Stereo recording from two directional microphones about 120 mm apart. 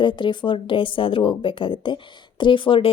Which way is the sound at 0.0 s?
40° left (ahead or behind).